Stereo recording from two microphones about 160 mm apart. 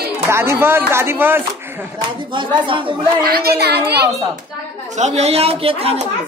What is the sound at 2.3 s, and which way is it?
Speech, 30° right (ahead or behind).